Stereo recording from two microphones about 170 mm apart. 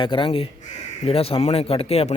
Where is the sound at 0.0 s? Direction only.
30° left (ahead or behind).